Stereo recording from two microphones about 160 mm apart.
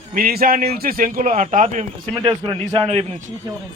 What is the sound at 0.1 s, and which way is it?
A man's voice, 65° right (ahead or behind).